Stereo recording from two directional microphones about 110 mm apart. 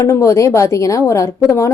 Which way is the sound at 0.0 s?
30° left (ahead or behind).